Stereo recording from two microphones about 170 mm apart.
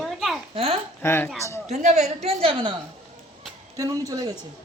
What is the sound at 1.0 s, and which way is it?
Speech, 15° left (ahead or behind).